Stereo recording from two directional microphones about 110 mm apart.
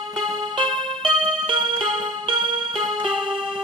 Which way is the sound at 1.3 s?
50° right (ahead or behind).